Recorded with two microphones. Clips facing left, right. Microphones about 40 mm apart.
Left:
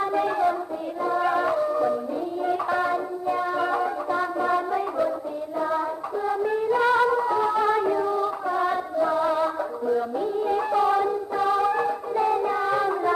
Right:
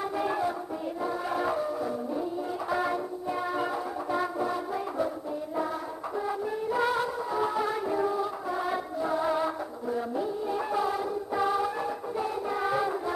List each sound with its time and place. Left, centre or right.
0.1 s music: centre
6.4 s music: left
6.7 s music: centre
7.0 s music: centre
7.3 s music: centre